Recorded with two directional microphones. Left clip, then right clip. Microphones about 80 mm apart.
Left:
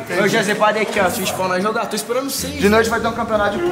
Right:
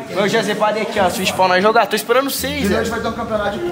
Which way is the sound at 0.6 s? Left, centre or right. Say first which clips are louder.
Left 1 dB; centre.